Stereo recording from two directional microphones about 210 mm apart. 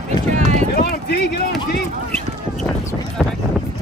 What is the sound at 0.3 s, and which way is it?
Run, 35° right (ahead or behind).